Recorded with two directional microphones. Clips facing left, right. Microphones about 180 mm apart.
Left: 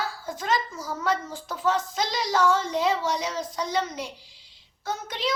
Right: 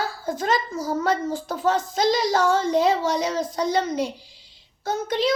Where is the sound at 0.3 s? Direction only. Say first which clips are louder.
Right 4 dB; 40° right (ahead or behind).